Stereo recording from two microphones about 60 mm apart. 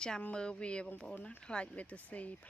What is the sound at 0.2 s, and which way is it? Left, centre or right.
Speech, centre.